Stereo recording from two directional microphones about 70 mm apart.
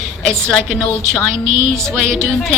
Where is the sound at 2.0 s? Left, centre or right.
Centre.